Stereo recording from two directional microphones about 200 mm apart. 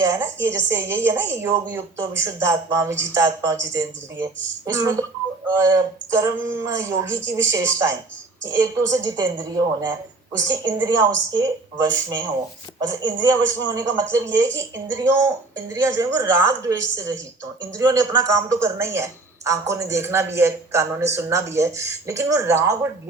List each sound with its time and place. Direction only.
0.0 s speech: 15° right (ahead or behind)